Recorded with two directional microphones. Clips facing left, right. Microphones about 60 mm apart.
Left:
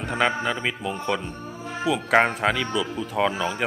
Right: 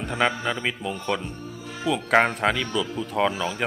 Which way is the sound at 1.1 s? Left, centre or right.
Centre.